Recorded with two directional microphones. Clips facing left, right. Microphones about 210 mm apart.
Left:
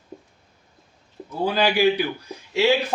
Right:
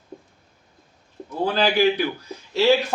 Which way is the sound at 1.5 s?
15° left (ahead or behind).